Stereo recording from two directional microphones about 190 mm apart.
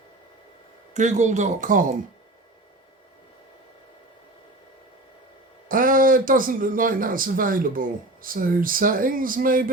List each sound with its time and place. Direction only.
0.9 s speech: 40° right (ahead or behind)
5.6 s speech: 45° right (ahead or behind)